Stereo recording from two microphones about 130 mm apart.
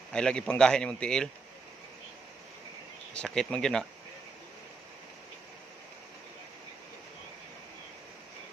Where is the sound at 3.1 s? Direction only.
5° left (ahead or behind).